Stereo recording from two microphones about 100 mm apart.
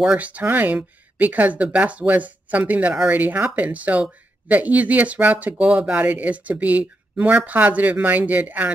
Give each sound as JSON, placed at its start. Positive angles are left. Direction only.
{"t": 0.0, "sound": "speech", "side_deg": -10}